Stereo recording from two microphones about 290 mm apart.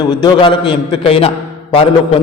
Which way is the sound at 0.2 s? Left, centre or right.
Centre.